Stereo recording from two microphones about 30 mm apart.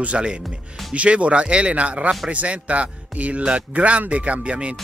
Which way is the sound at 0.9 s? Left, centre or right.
Right.